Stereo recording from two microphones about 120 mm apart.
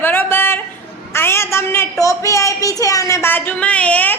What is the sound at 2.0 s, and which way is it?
A woman's voice, 25° left (ahead or behind).